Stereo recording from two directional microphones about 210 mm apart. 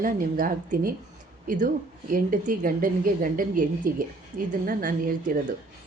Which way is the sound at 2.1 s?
40° right (ahead or behind).